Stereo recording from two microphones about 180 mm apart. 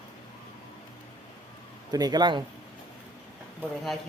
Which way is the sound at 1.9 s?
20° right (ahead or behind).